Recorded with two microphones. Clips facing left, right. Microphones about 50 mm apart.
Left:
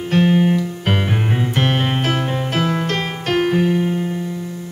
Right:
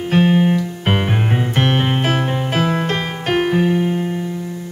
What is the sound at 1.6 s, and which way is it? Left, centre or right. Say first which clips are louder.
Music: right 2 dB; centre.